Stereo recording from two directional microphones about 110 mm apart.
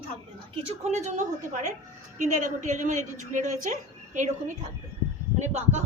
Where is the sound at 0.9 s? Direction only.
90° right.